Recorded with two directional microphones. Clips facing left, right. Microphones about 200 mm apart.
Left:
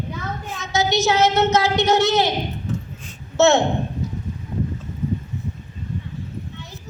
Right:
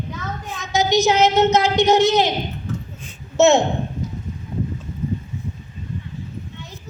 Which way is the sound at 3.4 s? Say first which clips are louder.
Right 1 dB; 20° right (ahead or behind).